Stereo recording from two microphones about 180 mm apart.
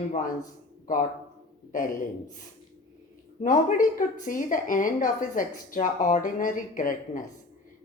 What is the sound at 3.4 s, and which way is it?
A woman's voice, 50° left (ahead or behind).